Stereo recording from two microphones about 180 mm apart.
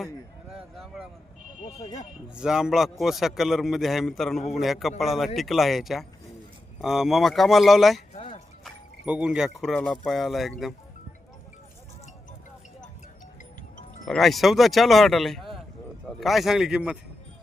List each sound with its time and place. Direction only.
0.5 s a sound: centre (ahead or behind)
1.6 s speech: 25° left (ahead or behind)
2.3 s speech: 5° right (ahead or behind)
8.1 s a sound: 35° left (ahead or behind)
8.6 s speech: 5° right (ahead or behind)
14.0 s speech: centre (ahead or behind)